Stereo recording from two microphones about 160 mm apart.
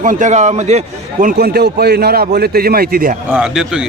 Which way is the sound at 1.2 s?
75° right (ahead or behind).